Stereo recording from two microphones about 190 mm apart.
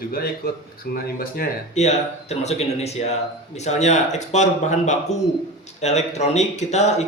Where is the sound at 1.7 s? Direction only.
35° left (ahead or behind).